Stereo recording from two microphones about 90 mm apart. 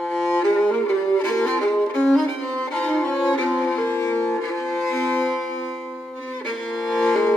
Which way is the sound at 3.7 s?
15° left (ahead or behind).